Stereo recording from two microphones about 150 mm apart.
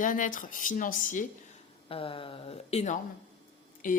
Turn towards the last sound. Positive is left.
turn(degrees=65)  # may be behind; listen again after turning